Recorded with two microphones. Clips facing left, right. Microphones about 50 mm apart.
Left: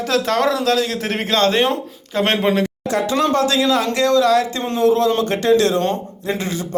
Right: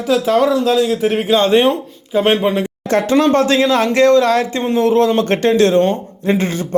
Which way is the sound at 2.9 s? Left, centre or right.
Right.